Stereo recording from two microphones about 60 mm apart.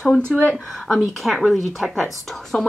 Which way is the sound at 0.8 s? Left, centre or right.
Centre.